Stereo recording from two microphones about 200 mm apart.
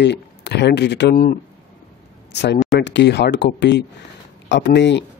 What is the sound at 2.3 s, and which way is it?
Speech, 55° left (ahead or behind).